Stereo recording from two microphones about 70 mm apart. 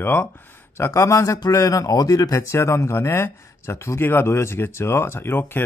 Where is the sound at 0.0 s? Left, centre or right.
Left.